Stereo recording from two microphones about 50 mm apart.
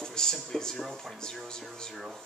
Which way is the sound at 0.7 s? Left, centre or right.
Centre.